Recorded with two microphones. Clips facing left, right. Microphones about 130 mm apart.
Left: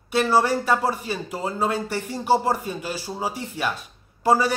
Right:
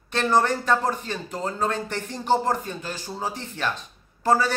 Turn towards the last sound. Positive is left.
turn(degrees=10)  # may be behind; listen again after turning